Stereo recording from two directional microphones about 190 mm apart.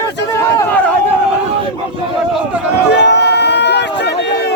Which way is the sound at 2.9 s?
65° left (ahead or behind).